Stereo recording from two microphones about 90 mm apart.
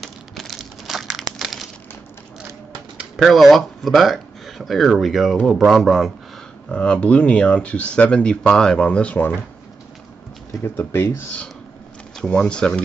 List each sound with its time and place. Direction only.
0.0 s crumpling: centre (ahead or behind)
3.2 s speech: centre (ahead or behind)
6.7 s speech: 10° left (ahead or behind)
10.6 s speech: 25° left (ahead or behind)
12.2 s speech: 10° left (ahead or behind)